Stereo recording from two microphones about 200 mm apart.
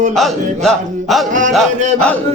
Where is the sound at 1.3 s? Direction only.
40° right (ahead or behind).